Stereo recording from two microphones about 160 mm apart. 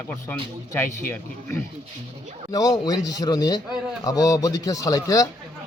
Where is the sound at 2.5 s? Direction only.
25° left (ahead or behind).